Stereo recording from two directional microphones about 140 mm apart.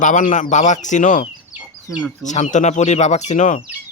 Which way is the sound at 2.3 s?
60° left (ahead or behind).